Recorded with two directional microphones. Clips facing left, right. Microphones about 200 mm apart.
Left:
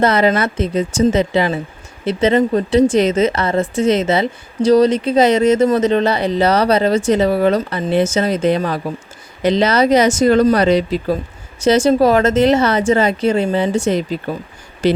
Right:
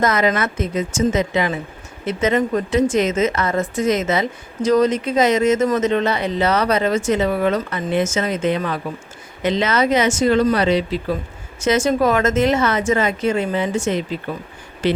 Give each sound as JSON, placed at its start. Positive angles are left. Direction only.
{"t": 0.0, "sound": "a woman's voice", "side_deg": 30}